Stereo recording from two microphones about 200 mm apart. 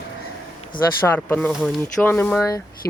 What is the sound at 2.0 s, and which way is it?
Speech, 5° left (ahead or behind).